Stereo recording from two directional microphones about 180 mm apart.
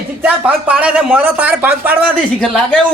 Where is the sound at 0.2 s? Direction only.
5° right (ahead or behind).